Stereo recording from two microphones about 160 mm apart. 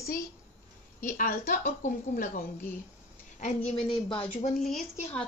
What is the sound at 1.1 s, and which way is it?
Speech, 60° left (ahead or behind).